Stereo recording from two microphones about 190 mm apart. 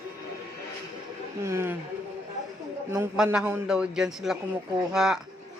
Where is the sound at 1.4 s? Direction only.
15° right (ahead or behind).